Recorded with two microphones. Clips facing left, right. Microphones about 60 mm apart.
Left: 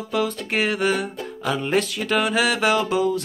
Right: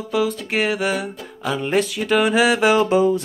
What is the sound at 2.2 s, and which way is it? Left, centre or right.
Music, centre.